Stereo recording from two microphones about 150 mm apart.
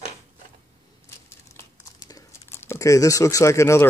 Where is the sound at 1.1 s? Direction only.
20° left (ahead or behind).